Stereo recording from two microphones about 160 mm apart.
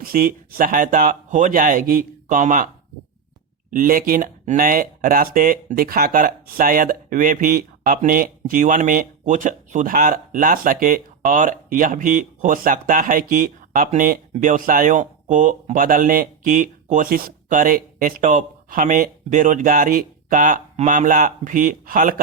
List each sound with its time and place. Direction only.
0.0 s speech: 65° right (ahead or behind)
3.7 s speech: 60° right (ahead or behind)